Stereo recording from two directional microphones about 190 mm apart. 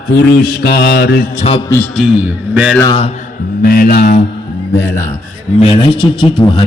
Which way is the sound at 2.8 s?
25° left (ahead or behind).